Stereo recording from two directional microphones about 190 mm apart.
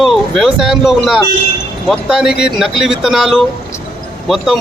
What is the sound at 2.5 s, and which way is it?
Speech, centre (ahead or behind).